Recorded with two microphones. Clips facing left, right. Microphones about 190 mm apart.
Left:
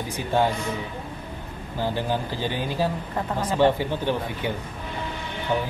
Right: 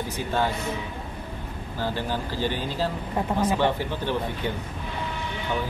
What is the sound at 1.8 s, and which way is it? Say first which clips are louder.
A man's voice: left 3 dB; 15° left (ahead or behind).